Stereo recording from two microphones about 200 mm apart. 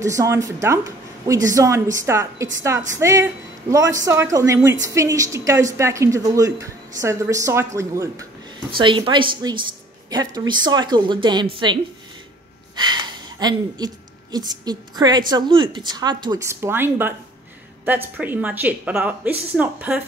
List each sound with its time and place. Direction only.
0.0 s a woman's voice: 15° right (ahead or behind)